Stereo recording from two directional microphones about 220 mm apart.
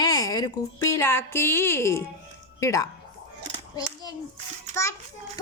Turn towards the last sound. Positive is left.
turn(degrees=15)  # may be behind; listen again after turning